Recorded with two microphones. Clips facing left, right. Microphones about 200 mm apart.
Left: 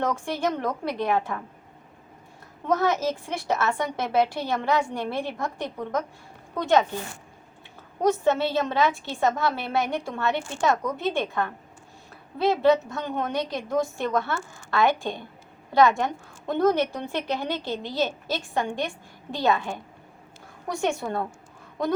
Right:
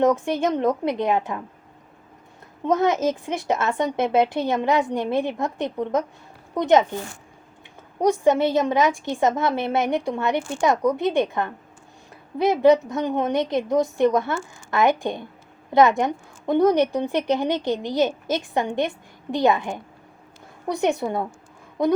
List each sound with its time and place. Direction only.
0.0 s a woman's voice: 20° right (ahead or behind)
2.6 s a woman's voice: 20° right (ahead or behind)
8.0 s a woman's voice: 15° right (ahead or behind)